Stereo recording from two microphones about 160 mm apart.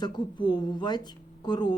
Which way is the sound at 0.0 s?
30° left (ahead or behind).